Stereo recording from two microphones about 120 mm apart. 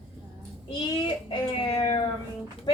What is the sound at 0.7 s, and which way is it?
Speech, 45° left (ahead or behind).